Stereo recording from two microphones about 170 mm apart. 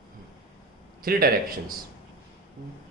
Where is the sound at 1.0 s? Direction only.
60° right (ahead or behind).